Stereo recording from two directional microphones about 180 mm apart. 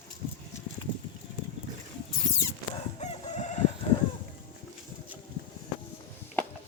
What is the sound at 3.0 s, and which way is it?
Crowing, 40° left (ahead or behind).